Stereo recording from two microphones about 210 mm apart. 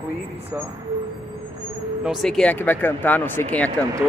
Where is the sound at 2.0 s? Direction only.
Centre (ahead or behind).